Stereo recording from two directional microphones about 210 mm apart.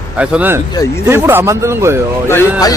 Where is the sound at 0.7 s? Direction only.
15° left (ahead or behind).